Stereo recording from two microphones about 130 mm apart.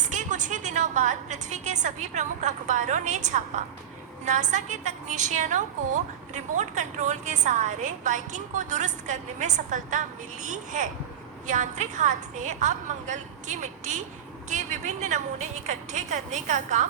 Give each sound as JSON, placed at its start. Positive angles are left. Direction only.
{"t": 0.1, "sound": "a woman's voice", "side_deg": -75}